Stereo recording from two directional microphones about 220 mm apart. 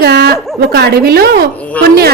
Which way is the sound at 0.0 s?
50° right (ahead or behind).